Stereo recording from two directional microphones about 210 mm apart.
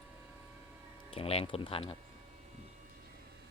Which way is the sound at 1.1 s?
25° left (ahead or behind).